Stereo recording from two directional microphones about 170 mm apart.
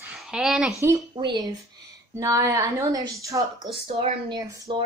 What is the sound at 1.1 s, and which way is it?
Speech, 30° right (ahead or behind).